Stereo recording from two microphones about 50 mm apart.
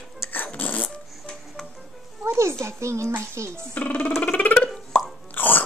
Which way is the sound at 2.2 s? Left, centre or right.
Right.